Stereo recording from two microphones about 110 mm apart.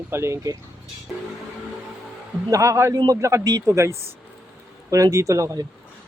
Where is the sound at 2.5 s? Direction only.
30° right (ahead or behind).